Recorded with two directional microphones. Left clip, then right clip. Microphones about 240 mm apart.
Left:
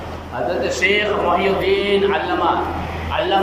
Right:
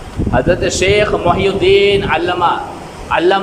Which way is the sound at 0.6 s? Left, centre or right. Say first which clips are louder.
Right 5 dB; right.